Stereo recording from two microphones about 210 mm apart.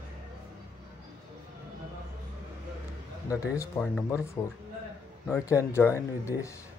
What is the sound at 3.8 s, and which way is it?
Speech, 5° left (ahead or behind).